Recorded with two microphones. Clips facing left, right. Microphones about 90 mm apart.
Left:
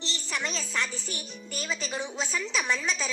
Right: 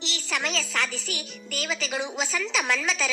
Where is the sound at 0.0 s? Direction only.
90° right.